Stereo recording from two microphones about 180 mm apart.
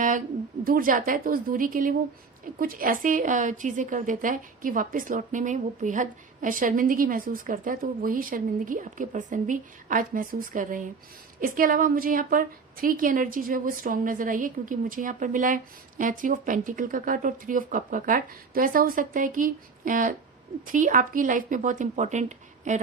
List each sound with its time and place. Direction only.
0.6 s a woman's voice: 50° right (ahead or behind)